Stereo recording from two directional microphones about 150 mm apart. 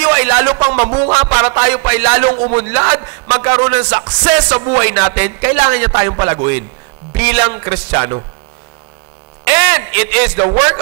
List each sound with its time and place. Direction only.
0.0 s a sound: 15° right (ahead or behind)
1.3 s music: 15° right (ahead or behind)
9.4 s music: 15° right (ahead or behind)